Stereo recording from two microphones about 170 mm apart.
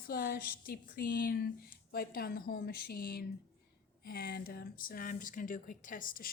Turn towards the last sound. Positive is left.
turn(degrees=55)  # may be behind; listen again after turning